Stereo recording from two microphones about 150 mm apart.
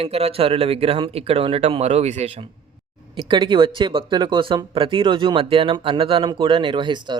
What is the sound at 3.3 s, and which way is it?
Speech, 30° right (ahead or behind).